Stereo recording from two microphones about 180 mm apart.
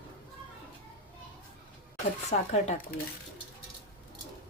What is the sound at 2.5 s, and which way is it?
Speech, 35° left (ahead or behind).